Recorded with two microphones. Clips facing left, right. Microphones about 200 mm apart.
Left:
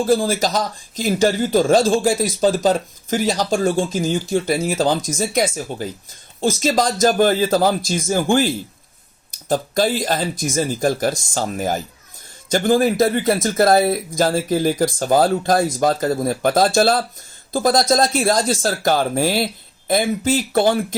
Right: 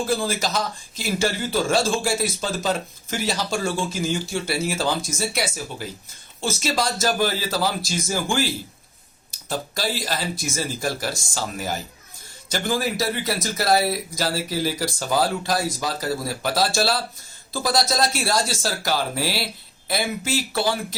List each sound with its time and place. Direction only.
0.0 s speech: 40° left (ahead or behind)